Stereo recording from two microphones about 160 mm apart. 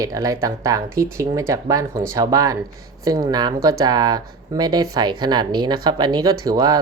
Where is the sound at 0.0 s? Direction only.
20° right (ahead or behind).